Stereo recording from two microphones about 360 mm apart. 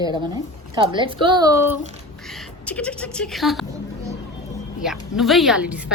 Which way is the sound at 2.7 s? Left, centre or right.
Centre.